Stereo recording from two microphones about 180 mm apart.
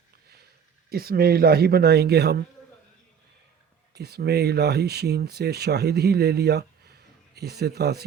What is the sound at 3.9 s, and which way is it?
Speech, 65° right (ahead or behind).